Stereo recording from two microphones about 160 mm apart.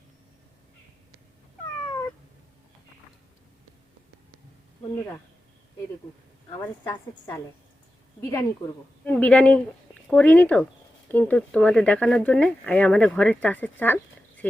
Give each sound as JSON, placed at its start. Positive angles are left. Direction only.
{"t": 6.5, "sound": "a woman's voice", "side_deg": 20}